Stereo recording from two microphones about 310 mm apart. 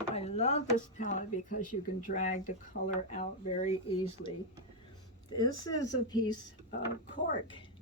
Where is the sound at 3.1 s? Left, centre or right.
Left.